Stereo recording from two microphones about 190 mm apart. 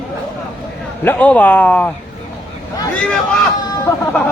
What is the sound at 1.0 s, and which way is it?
Speech, 10° left (ahead or behind).